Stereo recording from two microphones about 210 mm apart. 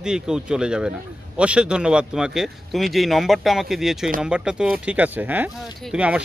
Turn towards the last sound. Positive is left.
turn(degrees=-5)  # may be behind; listen again after turning